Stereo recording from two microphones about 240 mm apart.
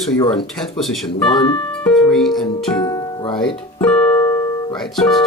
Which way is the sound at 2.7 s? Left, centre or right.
Centre.